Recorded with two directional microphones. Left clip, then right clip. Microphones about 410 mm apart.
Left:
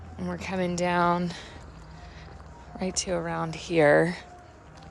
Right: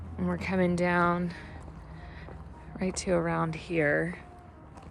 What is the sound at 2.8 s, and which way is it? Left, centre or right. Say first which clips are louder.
Speech: right 1 dB; centre.